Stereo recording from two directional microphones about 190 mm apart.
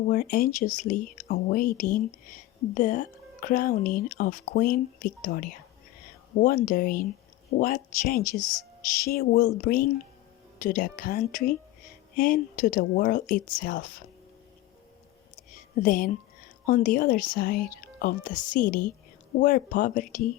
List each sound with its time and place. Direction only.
0.1 s speech: 50° left (ahead or behind)
15.7 s speech: 45° left (ahead or behind)